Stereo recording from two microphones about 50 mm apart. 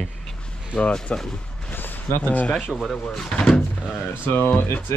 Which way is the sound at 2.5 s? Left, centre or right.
Centre.